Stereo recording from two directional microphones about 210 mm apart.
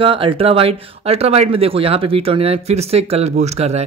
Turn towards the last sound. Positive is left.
turn(degrees=-30)  # may be behind; listen again after turning